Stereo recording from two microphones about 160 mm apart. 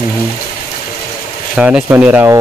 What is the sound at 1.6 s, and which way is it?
Speech, 10° right (ahead or behind).